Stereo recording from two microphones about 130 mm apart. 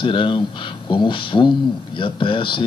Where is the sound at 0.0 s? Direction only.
40° left (ahead or behind).